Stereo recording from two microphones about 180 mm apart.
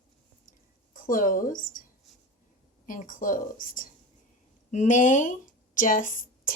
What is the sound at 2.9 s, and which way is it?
Speech, 50° left (ahead or behind).